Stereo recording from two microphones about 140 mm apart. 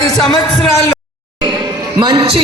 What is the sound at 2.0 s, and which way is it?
Speech, 35° right (ahead or behind).